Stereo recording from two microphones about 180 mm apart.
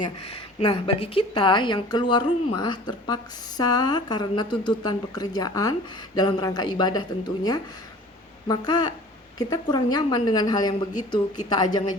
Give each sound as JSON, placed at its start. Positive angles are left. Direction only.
{"t": 0.0, "sound": "a woman's voice", "side_deg": 30}